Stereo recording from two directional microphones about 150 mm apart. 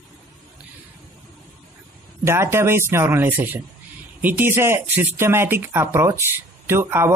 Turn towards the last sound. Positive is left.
turn(degrees=-15)  # may be behind; listen again after turning